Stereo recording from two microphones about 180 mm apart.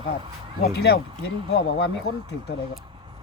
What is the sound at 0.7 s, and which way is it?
Speech, 65° left (ahead or behind).